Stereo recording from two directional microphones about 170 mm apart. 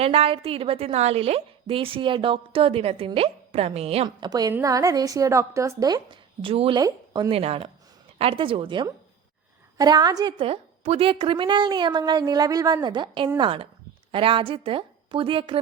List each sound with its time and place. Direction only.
0.0 s a woman's voice: 35° right (ahead or behind)
7.3 s a woman's voice: 35° right (ahead or behind)